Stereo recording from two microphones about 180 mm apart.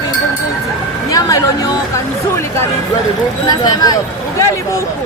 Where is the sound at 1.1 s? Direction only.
20° left (ahead or behind).